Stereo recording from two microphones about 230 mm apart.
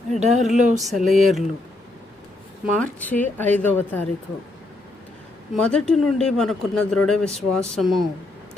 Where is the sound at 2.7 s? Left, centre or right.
Centre.